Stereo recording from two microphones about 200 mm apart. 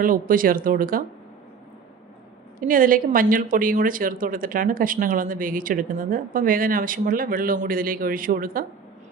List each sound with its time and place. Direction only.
0.0 s a woman's voice: 45° right (ahead or behind)
2.6 s a woman's voice: 45° right (ahead or behind)